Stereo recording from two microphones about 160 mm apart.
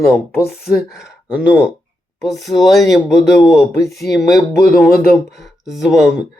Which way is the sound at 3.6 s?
20° left (ahead or behind).